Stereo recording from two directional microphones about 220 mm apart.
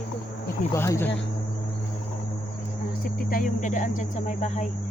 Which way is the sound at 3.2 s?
40° left (ahead or behind).